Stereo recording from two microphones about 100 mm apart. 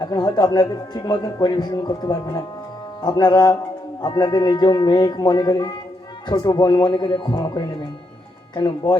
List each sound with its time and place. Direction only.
0.0 s speech: 45° left (ahead or behind)